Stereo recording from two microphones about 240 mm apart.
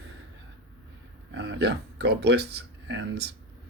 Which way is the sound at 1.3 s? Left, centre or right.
Right.